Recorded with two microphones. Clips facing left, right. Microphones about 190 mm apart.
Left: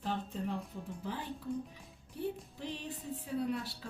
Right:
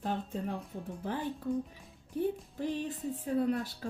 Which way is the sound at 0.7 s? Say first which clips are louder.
Right 3 dB; 55° right (ahead or behind).